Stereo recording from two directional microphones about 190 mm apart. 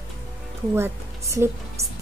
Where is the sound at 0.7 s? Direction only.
15° right (ahead or behind).